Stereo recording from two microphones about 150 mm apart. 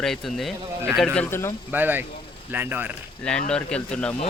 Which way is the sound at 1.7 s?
10° right (ahead or behind).